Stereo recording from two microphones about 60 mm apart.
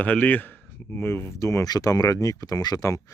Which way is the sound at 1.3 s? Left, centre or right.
Left.